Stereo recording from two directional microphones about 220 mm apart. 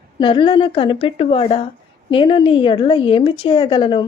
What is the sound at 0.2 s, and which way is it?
A woman's voice, 25° left (ahead or behind).